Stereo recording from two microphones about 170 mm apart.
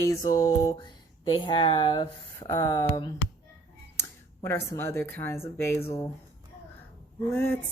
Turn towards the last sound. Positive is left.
turn(degrees=15)  # may be behind; listen again after turning